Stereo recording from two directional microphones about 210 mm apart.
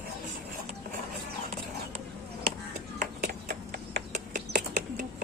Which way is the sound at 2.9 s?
45° right (ahead or behind).